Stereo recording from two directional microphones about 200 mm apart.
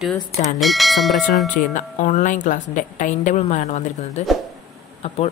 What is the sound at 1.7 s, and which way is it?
A woman's voice, 35° left (ahead or behind).